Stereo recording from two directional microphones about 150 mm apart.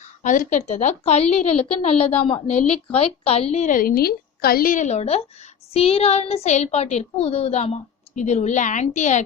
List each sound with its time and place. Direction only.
0.2 s a woman's voice: 55° left (ahead or behind)